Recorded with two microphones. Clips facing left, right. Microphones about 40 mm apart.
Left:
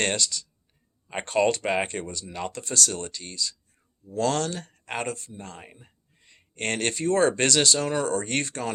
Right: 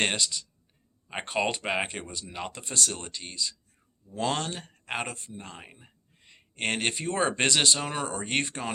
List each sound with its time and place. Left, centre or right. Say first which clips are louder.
0.0 s speech: left 1 dB; right